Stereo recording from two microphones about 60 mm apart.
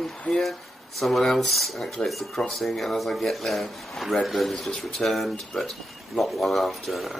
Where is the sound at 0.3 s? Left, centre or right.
Centre.